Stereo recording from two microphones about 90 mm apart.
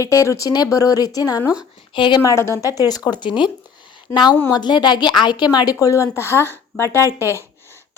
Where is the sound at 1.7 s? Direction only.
80° left; by 2.2 s 65° left (ahead or behind).